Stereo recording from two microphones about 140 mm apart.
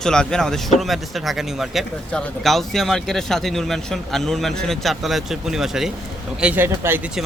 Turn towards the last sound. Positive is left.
turn(degrees=-15)  # may be behind; listen again after turning